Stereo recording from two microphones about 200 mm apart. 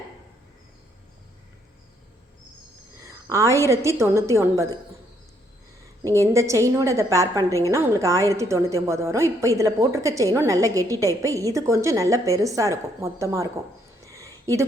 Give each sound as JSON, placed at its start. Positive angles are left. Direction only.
{"t": 3.0, "sound": "a woman's voice", "side_deg": -15}
{"t": 6.1, "sound": "a woman's voice", "side_deg": -15}
{"t": 14.0, "sound": "a sound", "side_deg": -15}